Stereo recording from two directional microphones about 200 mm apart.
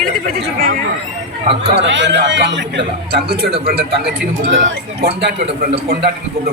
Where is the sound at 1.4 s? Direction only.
30° right (ahead or behind).